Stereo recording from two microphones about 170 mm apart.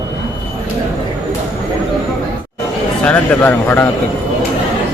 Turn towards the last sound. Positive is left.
turn(degrees=10)  # may be behind; listen again after turning